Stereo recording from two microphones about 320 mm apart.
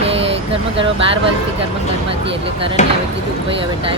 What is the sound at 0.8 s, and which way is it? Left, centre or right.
Speech, centre.